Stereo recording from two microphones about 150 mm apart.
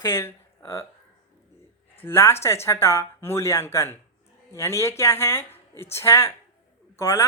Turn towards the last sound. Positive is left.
turn(degrees=20)  # may be behind; listen again after turning